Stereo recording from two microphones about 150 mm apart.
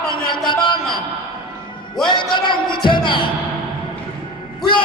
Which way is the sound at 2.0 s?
30° left (ahead or behind).